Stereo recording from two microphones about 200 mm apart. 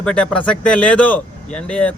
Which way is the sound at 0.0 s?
5° left (ahead or behind).